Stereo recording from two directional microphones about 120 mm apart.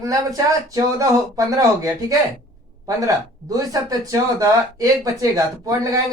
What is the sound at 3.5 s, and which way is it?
Speech, 30° right (ahead or behind).